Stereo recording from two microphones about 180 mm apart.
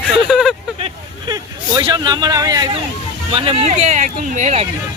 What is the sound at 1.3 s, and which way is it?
Speech, 20° right (ahead or behind).